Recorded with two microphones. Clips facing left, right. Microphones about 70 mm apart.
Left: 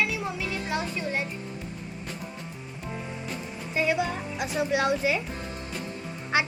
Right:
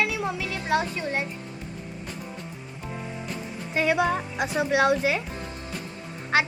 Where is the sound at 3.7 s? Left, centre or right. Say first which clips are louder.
Right 3 dB; right.